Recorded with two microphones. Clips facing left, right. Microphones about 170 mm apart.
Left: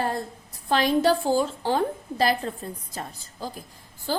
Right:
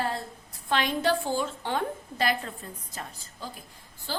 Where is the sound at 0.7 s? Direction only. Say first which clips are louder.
Left 5 dB; 35° left (ahead or behind).